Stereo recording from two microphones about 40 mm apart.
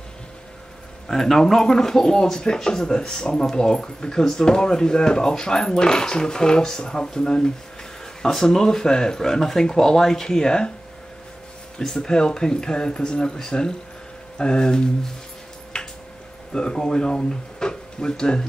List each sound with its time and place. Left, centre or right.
1.0 s speech: centre
11.8 s speech: centre
15.7 s a sound: left
16.5 s speech: centre